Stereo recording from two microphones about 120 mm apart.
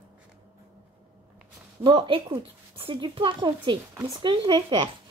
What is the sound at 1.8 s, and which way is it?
A woman's voice, 40° right (ahead or behind).